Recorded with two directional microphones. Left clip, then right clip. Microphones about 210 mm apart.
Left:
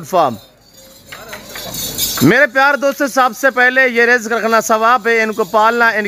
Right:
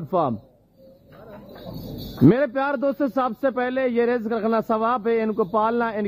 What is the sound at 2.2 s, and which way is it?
Speech, 10° left (ahead or behind).